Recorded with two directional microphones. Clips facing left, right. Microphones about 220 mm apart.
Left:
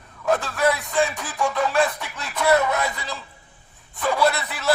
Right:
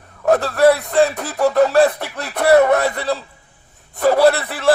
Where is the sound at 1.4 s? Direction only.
40° right (ahead or behind).